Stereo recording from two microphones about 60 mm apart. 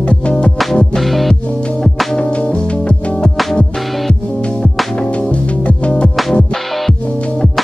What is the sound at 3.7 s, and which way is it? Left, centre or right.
Music, centre.